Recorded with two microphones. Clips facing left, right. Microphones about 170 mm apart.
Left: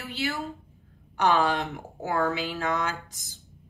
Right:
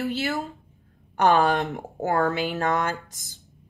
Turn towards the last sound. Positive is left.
turn(degrees=-50)  # may be behind; listen again after turning